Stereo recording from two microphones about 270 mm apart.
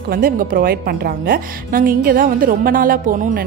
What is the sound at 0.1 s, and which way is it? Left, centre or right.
A woman's voice, right.